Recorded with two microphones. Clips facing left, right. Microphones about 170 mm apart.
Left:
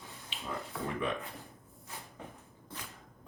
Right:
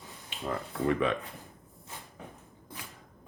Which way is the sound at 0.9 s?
90° right.